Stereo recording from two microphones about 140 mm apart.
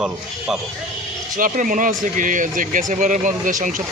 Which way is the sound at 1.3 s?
75° right (ahead or behind).